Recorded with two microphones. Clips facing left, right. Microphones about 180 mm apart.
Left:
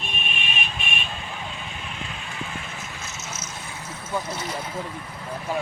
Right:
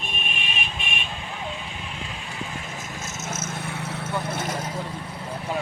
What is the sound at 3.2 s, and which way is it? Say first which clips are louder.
Vehicle: right 5 dB; 50° right (ahead or behind).